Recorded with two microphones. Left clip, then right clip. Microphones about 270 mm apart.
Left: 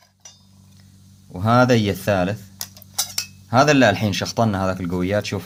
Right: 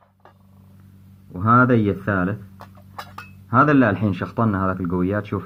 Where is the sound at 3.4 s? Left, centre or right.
Left.